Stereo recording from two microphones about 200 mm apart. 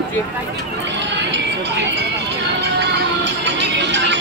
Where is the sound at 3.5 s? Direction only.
60° right (ahead or behind).